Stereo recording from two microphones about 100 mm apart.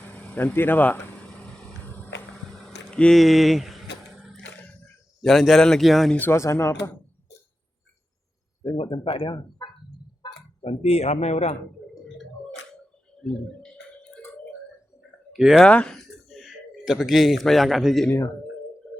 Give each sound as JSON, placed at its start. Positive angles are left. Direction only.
{"t": 0.0, "sound": "vehicle", "side_deg": 20}
{"t": 2.9, "sound": "a sound", "side_deg": 10}
{"t": 5.2, "sound": "speech", "side_deg": 0}
{"t": 6.1, "sound": "speech", "side_deg": 20}
{"t": 8.6, "sound": "speech", "side_deg": 60}
{"t": 9.6, "sound": "fowl", "side_deg": 40}
{"t": 10.6, "sound": "speech", "side_deg": 90}
{"t": 13.2, "sound": "a sound", "side_deg": 10}
{"t": 15.3, "sound": "speech", "side_deg": -5}
{"t": 15.6, "sound": "speech", "side_deg": 10}